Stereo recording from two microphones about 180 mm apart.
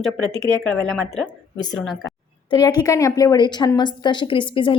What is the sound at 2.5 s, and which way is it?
A woman's voice, 20° left (ahead or behind).